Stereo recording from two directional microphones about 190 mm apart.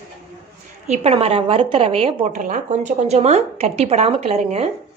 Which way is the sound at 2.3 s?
40° right (ahead or behind).